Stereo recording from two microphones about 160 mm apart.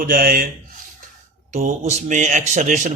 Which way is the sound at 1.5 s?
45° right (ahead or behind).